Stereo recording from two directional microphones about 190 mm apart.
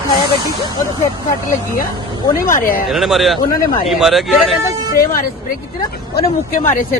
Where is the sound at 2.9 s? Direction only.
Centre (ahead or behind).